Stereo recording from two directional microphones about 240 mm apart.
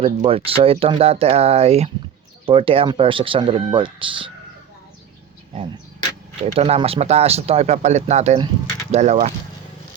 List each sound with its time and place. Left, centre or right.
0.0 s speech: right
6.4 s speech: right